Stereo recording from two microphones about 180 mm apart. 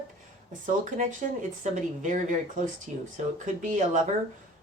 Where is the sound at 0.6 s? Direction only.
45° right (ahead or behind).